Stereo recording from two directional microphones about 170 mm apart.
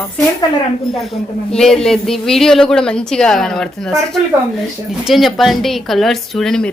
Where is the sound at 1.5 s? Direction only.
5° left (ahead or behind).